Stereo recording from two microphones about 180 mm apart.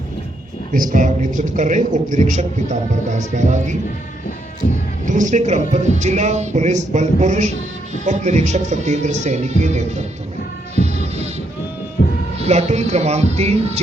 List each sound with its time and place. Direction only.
0.7 s a man's voice: 50° right (ahead or behind)
4.6 s music: 45° left (ahead or behind)
5.0 s speech: 45° right (ahead or behind)
10.8 s music: 35° right (ahead or behind)
12.0 s cat: 55° left (ahead or behind)
12.4 s speech: 35° right (ahead or behind)